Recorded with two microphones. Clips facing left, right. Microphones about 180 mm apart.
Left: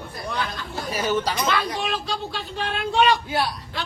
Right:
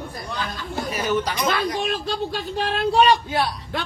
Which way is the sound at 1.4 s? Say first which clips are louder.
Right 2 dB; 45° right (ahead or behind).